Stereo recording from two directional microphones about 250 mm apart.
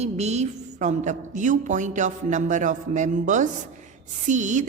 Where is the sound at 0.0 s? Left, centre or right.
Right.